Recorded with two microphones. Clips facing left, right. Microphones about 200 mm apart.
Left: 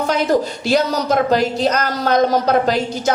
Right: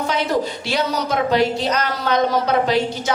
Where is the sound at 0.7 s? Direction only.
40° left (ahead or behind).